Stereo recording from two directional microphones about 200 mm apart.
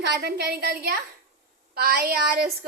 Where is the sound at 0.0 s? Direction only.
55° right (ahead or behind).